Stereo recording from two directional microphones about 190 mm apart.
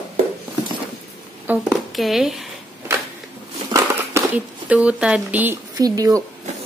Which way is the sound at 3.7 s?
10° right (ahead or behind).